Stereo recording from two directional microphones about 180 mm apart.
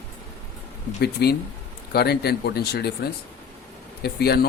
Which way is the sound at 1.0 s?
60° left (ahead or behind).